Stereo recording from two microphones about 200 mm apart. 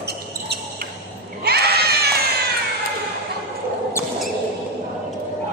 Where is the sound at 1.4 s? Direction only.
50° right (ahead or behind).